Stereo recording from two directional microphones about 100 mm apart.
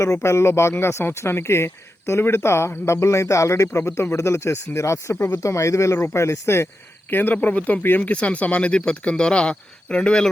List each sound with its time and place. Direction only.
0.0 s speech: 30° left (ahead or behind); by 10.2 s 10° left (ahead or behind)